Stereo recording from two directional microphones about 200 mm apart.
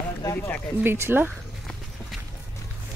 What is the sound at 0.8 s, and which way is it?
Speech, 10° right (ahead or behind).